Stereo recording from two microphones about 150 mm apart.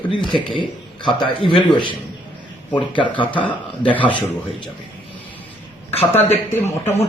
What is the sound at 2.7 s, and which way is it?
Speech, 30° left (ahead or behind).